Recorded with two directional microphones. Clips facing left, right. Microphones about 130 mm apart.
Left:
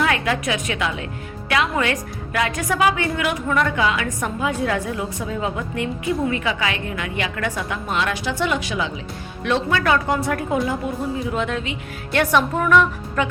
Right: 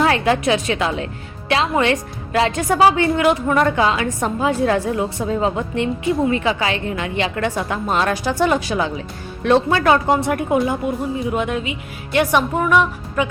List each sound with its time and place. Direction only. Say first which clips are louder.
0.0 s a woman's voice: right 5 dB; 30° right (ahead or behind); by 13.2 s 15° right (ahead or behind)